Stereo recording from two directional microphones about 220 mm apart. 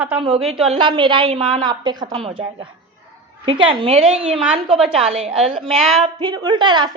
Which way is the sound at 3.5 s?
25° right (ahead or behind).